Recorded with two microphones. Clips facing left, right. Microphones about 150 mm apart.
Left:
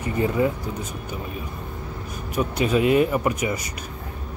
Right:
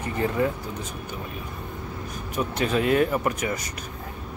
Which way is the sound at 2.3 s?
10° left (ahead or behind).